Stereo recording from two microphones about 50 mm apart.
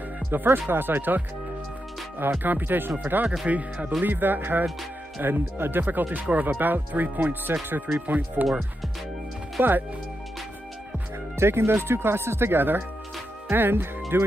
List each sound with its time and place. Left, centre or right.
0.3 s speech: right
2.4 s speech: right
4.0 s speech: right
9.6 s speech: right
11.3 s speech: right